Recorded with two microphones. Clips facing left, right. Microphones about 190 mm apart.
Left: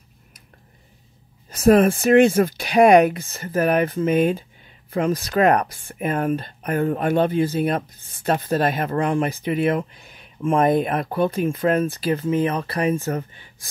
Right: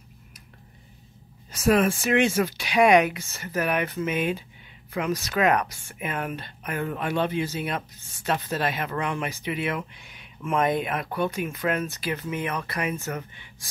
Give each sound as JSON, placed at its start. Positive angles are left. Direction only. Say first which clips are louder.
{"t": 1.5, "sound": "speech", "louder": "left 6 dB", "side_deg": 50}
{"t": 3.3, "sound": "speech", "louder": "left 7 dB", "side_deg": 35}